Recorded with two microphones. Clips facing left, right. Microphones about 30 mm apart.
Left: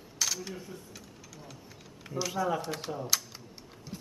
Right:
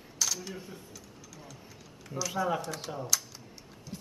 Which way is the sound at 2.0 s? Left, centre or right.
Left.